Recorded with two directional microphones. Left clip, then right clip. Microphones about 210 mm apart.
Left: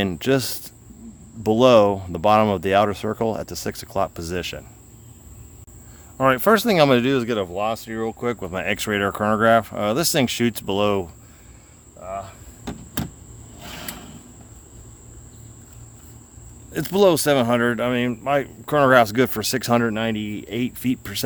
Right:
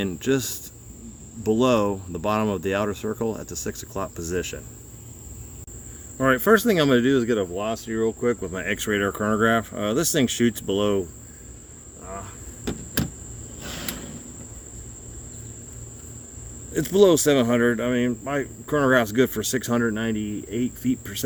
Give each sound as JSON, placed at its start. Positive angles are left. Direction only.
{"t": 0.0, "sound": "speech", "side_deg": 45}
{"t": 6.1, "sound": "speech", "side_deg": 40}
{"t": 16.7, "sound": "speech", "side_deg": 40}